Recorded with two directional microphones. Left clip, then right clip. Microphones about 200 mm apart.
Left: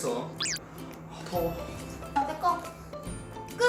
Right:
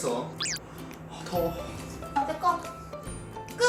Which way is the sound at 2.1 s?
Centre (ahead or behind).